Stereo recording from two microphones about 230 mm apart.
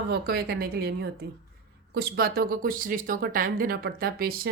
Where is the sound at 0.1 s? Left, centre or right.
Right.